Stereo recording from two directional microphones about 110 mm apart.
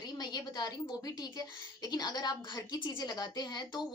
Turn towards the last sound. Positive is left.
turn(degrees=40)  # may be behind; listen again after turning